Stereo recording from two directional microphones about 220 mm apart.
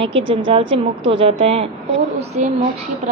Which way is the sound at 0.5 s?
25° right (ahead or behind).